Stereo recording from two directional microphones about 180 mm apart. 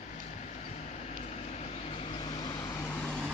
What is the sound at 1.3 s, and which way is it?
Vehicle, 35° left (ahead or behind).